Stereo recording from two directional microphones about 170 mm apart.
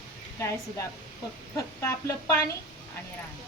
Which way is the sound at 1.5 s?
15° left (ahead or behind).